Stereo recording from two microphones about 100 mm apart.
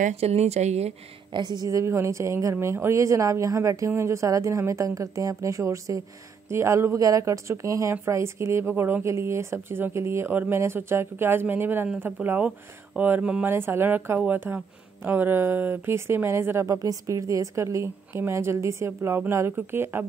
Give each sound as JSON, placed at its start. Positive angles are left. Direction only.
{"t": 0.1, "sound": "speech", "side_deg": -90}
{"t": 1.3, "sound": "a woman's voice", "side_deg": -45}
{"t": 1.7, "sound": "speech", "side_deg": -30}